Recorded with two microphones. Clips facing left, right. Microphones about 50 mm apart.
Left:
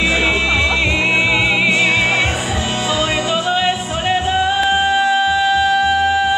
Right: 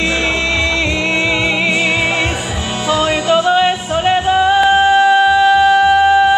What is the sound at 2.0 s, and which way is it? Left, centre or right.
Music, centre.